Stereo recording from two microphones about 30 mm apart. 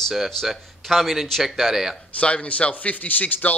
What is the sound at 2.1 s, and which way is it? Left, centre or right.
Speech, left.